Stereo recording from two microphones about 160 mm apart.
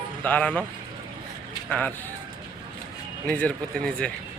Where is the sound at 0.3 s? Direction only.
10° left (ahead or behind).